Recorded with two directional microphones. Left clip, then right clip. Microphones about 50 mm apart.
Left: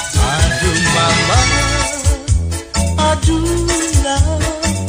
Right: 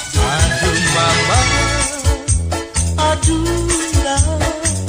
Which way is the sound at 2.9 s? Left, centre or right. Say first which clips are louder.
Even; left.